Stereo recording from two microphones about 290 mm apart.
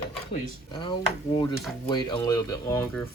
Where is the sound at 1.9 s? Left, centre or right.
Centre.